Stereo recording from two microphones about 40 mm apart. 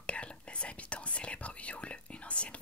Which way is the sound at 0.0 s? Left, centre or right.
Left.